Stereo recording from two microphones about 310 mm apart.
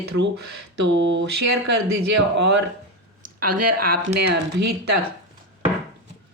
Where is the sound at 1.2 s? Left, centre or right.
Right.